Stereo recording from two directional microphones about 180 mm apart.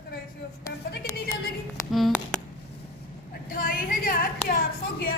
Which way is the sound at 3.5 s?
50° left (ahead or behind).